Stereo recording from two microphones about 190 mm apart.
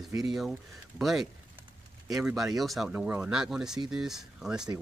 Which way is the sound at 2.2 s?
Centre (ahead or behind).